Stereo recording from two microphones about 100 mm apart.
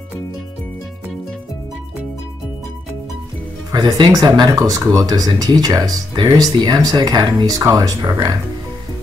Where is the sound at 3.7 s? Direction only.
45° right (ahead or behind).